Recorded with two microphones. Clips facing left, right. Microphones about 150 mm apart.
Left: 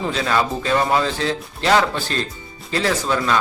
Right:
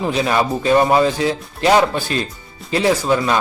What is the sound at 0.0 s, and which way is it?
Speech, 15° right (ahead or behind).